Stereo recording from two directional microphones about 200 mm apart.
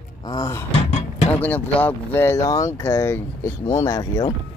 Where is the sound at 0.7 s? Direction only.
30° left (ahead or behind).